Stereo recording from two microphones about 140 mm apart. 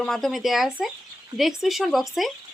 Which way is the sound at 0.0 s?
5° left (ahead or behind).